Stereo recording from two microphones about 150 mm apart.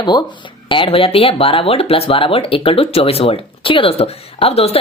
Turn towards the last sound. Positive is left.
turn(degrees=40)  # may be behind; listen again after turning